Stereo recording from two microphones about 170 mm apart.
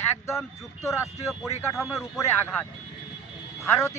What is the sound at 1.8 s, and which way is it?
Speech, centre (ahead or behind).